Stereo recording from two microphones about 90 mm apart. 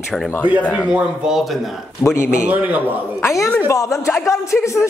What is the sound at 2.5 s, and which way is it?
Speech, 20° right (ahead or behind).